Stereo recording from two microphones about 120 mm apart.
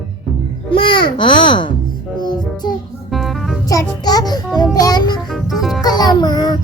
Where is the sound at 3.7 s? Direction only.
30° left (ahead or behind).